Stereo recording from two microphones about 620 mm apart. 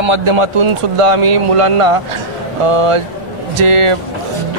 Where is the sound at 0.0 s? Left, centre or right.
Right.